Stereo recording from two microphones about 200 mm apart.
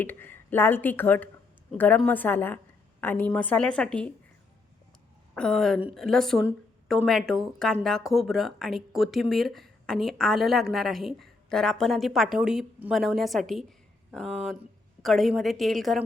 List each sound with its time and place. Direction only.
0.0 s speech: 10° left (ahead or behind)
5.3 s a woman's voice: 5° left (ahead or behind)